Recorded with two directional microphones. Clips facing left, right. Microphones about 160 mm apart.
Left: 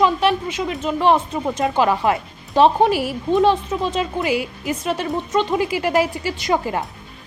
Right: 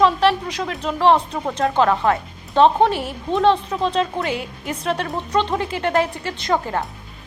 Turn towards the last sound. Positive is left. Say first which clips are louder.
# left 1 dB
turn(degrees=10)  # may be behind; listen again after turning